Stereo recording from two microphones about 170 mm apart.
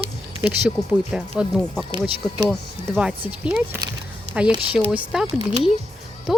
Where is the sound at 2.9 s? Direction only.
5° right (ahead or behind).